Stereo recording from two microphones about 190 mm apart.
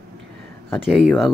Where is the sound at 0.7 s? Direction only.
Centre (ahead or behind).